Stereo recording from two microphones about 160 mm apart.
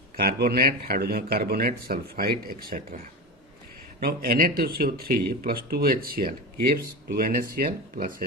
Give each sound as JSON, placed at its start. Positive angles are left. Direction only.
{"t": 0.2, "sound": "speech", "side_deg": -75}
{"t": 4.0, "sound": "speech", "side_deg": -70}